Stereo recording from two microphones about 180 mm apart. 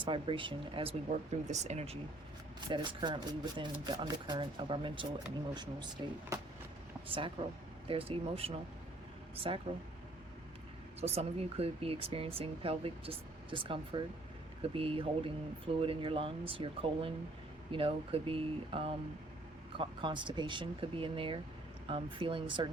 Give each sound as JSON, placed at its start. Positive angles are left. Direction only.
{"t": 0.0, "sound": "speech", "side_deg": -30}
{"t": 2.6, "sound": "speech", "side_deg": -25}
{"t": 11.0, "sound": "speech", "side_deg": -35}